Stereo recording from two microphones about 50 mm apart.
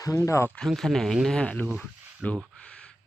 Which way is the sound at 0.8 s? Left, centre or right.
Centre.